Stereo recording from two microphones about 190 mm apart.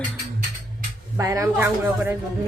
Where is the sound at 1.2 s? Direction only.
15° right (ahead or behind).